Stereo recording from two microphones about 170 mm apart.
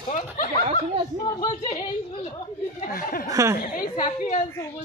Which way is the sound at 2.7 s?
55° left (ahead or behind).